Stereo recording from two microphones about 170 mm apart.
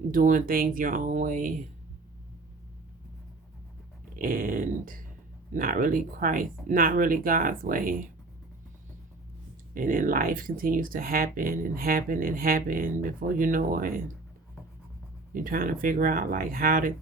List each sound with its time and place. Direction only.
0.1 s speech: 50° right (ahead or behind)
4.1 s speech: 55° right (ahead or behind)
9.7 s speech: 55° right (ahead or behind)
15.4 s speech: 55° right (ahead or behind)